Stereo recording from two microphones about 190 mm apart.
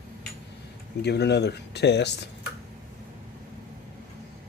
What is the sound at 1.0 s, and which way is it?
Speech, 60° left (ahead or behind).